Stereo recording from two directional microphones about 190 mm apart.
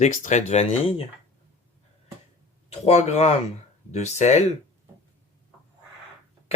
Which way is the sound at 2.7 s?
35° left (ahead or behind).